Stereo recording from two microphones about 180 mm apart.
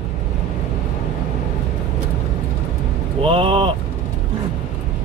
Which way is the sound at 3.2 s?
30° right (ahead or behind).